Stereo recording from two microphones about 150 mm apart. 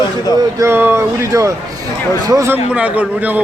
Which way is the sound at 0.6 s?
15° right (ahead or behind).